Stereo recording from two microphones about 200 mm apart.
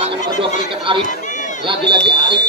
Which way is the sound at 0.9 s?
25° right (ahead or behind).